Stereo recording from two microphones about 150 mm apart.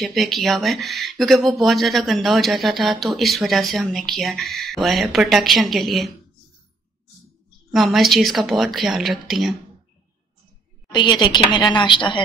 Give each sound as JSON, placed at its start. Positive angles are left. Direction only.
{"t": 0.0, "sound": "speech", "side_deg": 0}
{"t": 7.7, "sound": "speech", "side_deg": 0}
{"t": 10.9, "sound": "a woman's voice", "side_deg": 30}